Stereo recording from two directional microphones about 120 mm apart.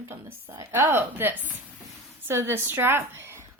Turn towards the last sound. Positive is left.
turn(degrees=-20)  # may be behind; listen again after turning